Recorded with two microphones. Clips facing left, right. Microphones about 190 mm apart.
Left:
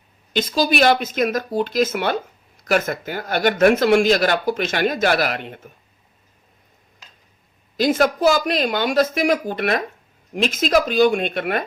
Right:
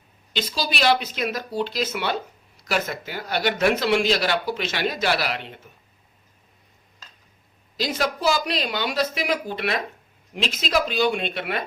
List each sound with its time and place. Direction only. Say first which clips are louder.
0.3 s speech: left 8 dB; 50° left (ahead or behind)
7.8 s speech: left 8 dB; 50° left (ahead or behind)